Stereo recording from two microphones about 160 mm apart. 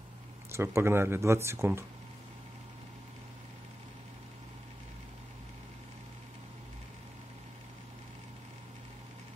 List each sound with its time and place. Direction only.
0.5 s speech: 15° right (ahead or behind)